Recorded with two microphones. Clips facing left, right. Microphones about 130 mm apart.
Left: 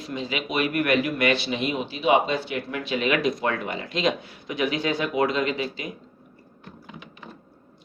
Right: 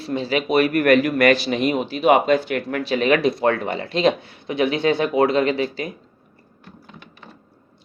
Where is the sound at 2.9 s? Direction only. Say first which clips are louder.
Right 5 dB; 35° right (ahead or behind).